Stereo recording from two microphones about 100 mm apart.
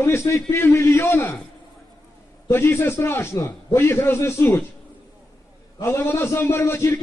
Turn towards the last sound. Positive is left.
turn(degrees=25)  # may be behind; listen again after turning